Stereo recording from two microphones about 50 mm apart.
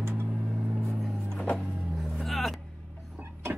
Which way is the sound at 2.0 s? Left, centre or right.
Centre.